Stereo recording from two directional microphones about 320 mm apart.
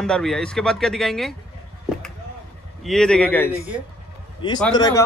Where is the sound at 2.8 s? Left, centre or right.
Centre.